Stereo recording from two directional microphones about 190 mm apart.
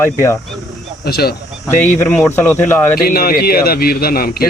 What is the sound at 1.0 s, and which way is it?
Speech, 55° left (ahead or behind).